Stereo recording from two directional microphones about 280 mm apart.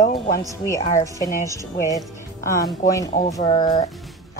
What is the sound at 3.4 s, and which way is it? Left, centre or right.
Speech, centre.